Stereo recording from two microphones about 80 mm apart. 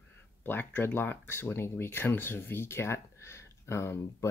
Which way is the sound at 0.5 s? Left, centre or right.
Left.